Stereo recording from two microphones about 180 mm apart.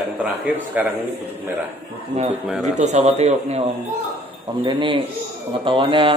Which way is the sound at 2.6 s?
40° right (ahead or behind).